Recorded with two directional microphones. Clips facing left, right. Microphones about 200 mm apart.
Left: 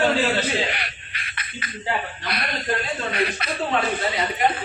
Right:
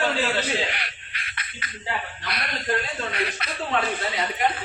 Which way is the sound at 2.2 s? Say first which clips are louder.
Left 3 dB; 5° left (ahead or behind).